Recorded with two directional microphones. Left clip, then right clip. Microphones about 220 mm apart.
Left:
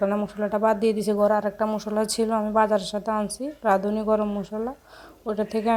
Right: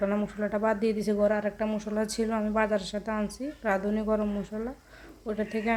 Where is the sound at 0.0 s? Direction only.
10° left (ahead or behind).